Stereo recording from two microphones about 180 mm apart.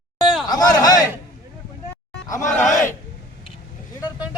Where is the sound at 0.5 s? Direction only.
20° left (ahead or behind).